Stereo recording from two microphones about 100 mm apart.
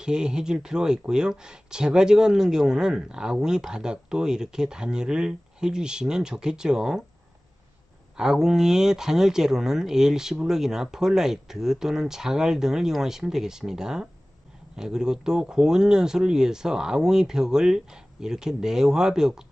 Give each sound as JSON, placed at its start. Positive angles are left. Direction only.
{"t": 0.0, "sound": "speech", "side_deg": -10}
{"t": 8.2, "sound": "speech", "side_deg": -5}